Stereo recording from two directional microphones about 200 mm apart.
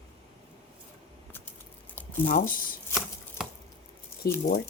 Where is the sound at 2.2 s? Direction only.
40° left (ahead or behind).